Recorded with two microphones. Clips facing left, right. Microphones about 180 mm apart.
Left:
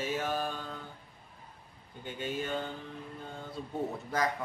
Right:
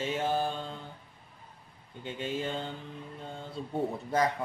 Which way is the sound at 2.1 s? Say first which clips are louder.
Right 1 dB; 25° right (ahead or behind).